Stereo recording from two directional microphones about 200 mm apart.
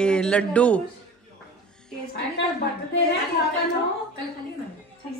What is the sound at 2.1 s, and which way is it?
Speech, 60° left (ahead or behind).